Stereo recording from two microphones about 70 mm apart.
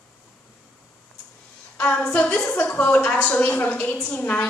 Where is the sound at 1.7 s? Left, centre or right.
Left.